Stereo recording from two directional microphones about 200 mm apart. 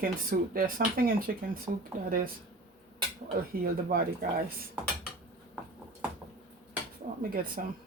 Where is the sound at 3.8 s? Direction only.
45° right (ahead or behind).